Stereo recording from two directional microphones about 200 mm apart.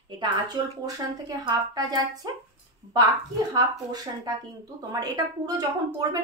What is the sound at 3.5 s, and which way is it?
A woman's voice, 20° right (ahead or behind).